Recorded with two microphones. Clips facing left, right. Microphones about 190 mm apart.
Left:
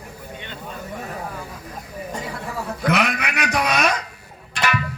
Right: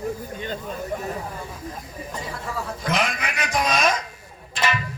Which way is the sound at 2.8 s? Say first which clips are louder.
Left 5 dB; 65° left (ahead or behind).